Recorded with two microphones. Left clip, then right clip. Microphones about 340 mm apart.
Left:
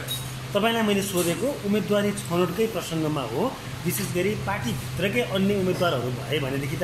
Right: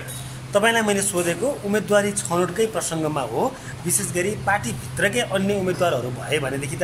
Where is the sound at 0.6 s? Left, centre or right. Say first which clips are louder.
Right 4 dB; right.